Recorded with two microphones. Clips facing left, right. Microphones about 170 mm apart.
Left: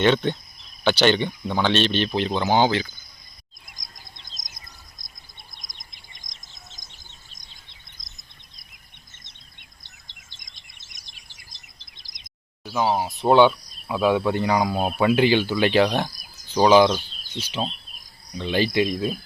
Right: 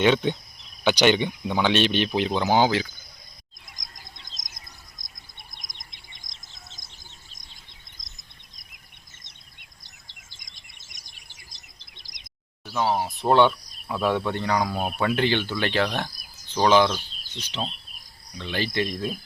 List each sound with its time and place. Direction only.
0.0 s speech: 10° right (ahead or behind)
5.4 s bird: 20° right (ahead or behind)
6.2 s bird: 60° right (ahead or behind)
12.7 s speech: 10° left (ahead or behind)